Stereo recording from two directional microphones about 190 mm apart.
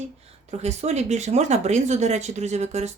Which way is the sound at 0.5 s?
35° right (ahead or behind).